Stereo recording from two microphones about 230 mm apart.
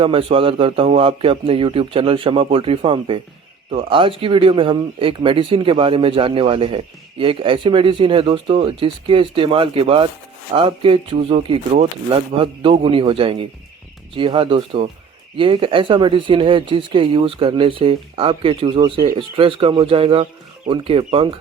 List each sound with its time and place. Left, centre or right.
0.0 s speech: right